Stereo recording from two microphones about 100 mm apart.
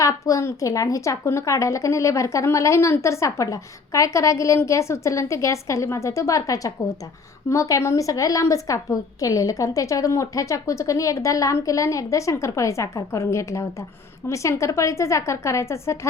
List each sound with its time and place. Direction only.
0.0 s a woman's voice: 35° left (ahead or behind)